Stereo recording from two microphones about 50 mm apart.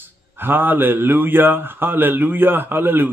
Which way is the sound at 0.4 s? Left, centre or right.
Right.